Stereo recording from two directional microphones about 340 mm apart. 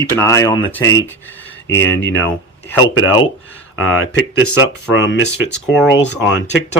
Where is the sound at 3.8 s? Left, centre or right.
Left.